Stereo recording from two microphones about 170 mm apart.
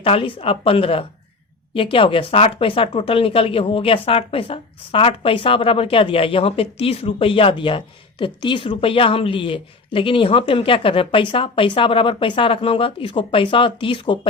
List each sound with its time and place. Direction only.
0.0 s speech: 35° left (ahead or behind)